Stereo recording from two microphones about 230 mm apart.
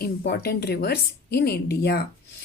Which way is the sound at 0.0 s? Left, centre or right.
Left.